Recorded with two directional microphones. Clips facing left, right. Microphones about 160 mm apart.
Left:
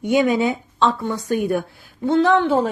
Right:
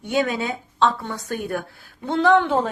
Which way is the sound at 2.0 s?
Centre (ahead or behind).